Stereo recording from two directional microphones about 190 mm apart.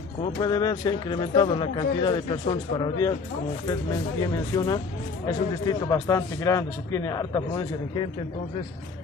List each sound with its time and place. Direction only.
0.2 s a man's voice: 20° left (ahead or behind)
4.2 s a man's voice: 20° left (ahead or behind)